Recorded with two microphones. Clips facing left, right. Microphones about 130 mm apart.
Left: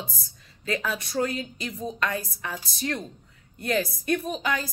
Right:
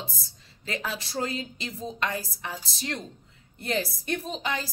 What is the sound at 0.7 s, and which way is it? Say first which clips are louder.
A woman's voice: left 4 dB; 25° right (ahead or behind).